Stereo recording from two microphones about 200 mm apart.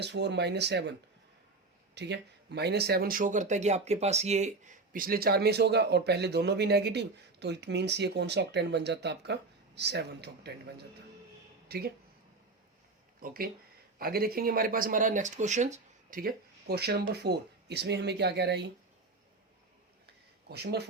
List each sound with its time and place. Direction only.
0.0 s speech: 60° right (ahead or behind)
2.0 s speech: 60° right (ahead or behind)
11.7 s speech: 50° right (ahead or behind)
13.1 s speech: 45° right (ahead or behind)
20.5 s speech: 55° right (ahead or behind)